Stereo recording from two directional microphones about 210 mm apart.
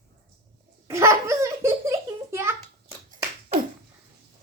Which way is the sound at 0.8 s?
15° right (ahead or behind).